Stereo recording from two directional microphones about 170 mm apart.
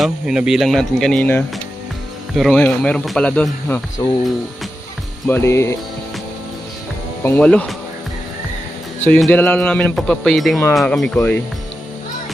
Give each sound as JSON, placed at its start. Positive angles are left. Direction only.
{"t": 0.0, "sound": "speech", "side_deg": -5}
{"t": 4.0, "sound": "speech", "side_deg": 25}
{"t": 5.3, "sound": "speech", "side_deg": 15}
{"t": 7.2, "sound": "speech", "side_deg": 10}
{"t": 9.0, "sound": "speech", "side_deg": 10}